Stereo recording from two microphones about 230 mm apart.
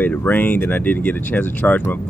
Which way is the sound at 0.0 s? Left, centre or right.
Centre.